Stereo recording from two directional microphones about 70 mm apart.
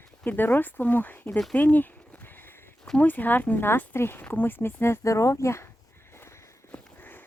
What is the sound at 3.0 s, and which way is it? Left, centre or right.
Speech, left.